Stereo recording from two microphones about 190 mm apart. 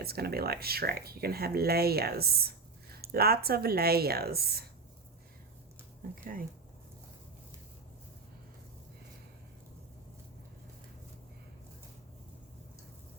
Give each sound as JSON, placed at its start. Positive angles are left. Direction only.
{"t": 0.0, "sound": "speech", "side_deg": -55}